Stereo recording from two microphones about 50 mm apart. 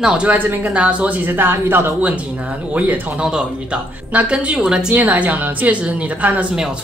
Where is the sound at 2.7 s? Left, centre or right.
Right.